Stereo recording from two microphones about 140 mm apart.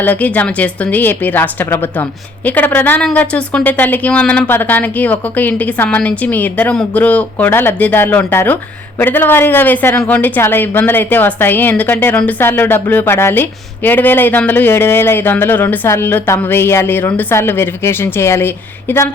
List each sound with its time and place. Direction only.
0.0 s speech: 10° left (ahead or behind)